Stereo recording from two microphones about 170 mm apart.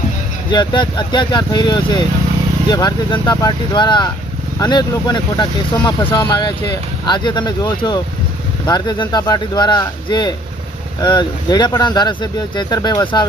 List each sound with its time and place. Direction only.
0.5 s speech: 25° left (ahead or behind)